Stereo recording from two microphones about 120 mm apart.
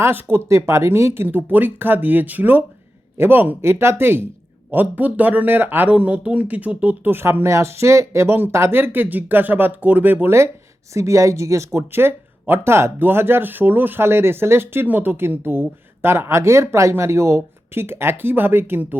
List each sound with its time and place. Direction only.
0.0 s speech: 20° right (ahead or behind)